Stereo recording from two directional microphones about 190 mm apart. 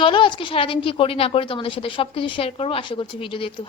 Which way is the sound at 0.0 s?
25° left (ahead or behind).